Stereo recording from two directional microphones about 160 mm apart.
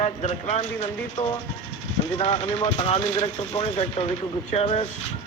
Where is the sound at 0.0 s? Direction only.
45° left (ahead or behind).